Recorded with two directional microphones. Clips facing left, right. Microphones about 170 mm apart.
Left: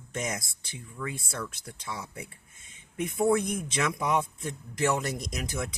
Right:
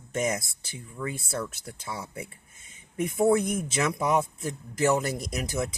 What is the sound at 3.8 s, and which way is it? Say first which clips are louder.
Speech: right 2 dB; 40° right (ahead or behind).